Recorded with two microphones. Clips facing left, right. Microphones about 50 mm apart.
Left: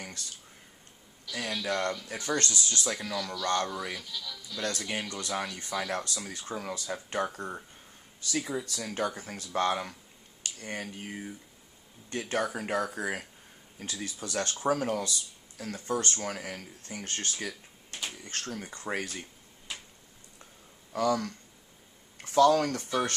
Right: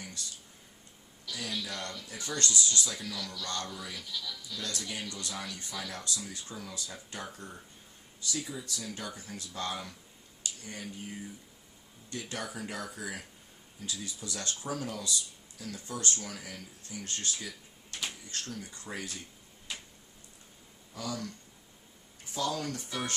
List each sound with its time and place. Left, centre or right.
1.3 s a man's voice: left
3.1 s speech: left
3.4 s speech: left
3.9 s speech: centre
4.5 s speech: left
12.1 s speech: left
20.9 s speech: left
22.2 s speech: left